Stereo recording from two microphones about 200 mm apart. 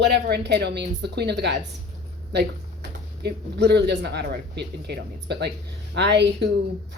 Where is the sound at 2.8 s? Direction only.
55° right (ahead or behind).